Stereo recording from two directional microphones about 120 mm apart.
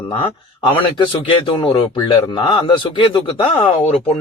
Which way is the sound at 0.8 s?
40° left (ahead or behind).